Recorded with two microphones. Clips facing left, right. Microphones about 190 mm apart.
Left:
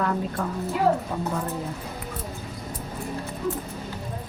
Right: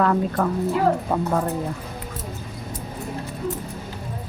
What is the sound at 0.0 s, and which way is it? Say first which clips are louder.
A woman's voice: right 6 dB; 70° right (ahead or behind).